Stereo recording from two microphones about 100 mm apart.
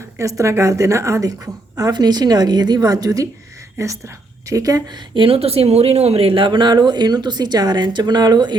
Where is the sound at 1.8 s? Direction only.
45° right (ahead or behind).